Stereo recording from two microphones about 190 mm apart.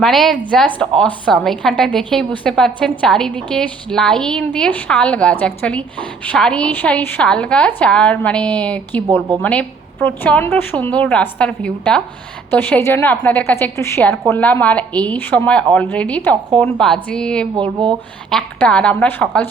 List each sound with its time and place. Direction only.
0.0 s a woman's voice: centre (ahead or behind)
17.6 s speech: 25° right (ahead or behind)
18.3 s a woman's voice: 5° left (ahead or behind)